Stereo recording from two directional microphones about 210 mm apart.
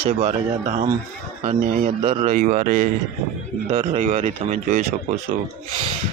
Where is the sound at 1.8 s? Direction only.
30° right (ahead or behind).